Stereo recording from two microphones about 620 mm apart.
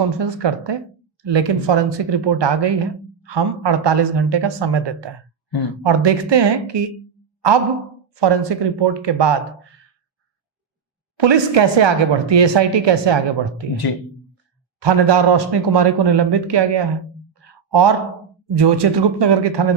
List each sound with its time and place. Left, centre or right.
0.2 s a woman's voice: right
8.1 s speech: right
11.2 s a woman's voice: right
14.8 s speech: right